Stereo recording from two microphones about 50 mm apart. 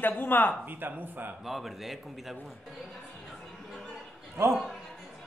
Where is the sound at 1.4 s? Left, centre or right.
Centre.